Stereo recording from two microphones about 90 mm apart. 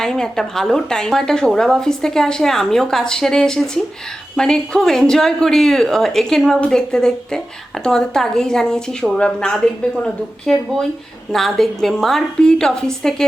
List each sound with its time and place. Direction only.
0.0 s a woman's voice: 5° left (ahead or behind)